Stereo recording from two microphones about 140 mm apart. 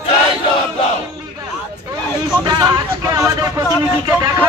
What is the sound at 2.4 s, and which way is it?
Speech, 25° right (ahead or behind).